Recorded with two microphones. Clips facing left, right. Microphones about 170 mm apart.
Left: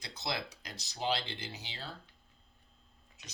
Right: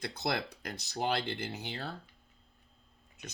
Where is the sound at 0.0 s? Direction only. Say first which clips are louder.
Right 5 dB; 55° right (ahead or behind).